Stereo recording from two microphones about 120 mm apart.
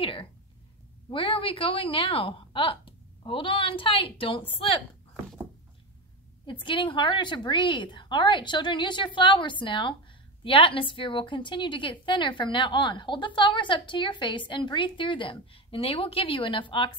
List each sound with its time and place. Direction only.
0.0 s a woman's voice: 45° left (ahead or behind)
6.4 s a woman's voice: 45° left (ahead or behind)